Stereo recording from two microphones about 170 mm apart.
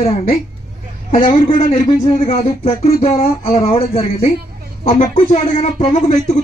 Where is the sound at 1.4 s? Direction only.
55° left (ahead or behind).